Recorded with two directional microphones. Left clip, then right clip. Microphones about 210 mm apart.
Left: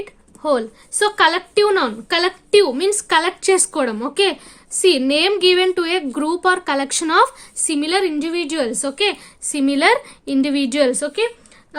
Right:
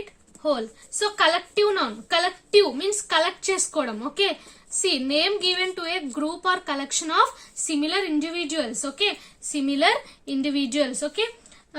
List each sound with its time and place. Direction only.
0.4 s a woman's voice: 45° left (ahead or behind)